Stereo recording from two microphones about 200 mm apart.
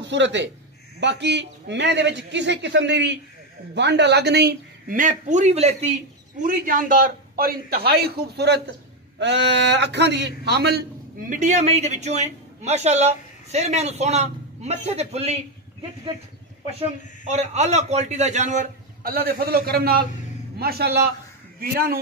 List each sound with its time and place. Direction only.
0.1 s a man's voice: 65° right (ahead or behind); by 5.9 s 30° right (ahead or behind)
6.4 s a man's voice: 45° right (ahead or behind)
11.3 s a man's voice: 35° right (ahead or behind)
17.2 s a man's voice: 35° right (ahead or behind)